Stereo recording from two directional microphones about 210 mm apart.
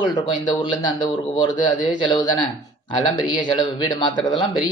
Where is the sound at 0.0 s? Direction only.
20° left (ahead or behind).